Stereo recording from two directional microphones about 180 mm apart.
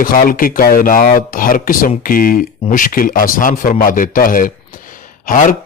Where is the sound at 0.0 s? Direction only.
50° left (ahead or behind).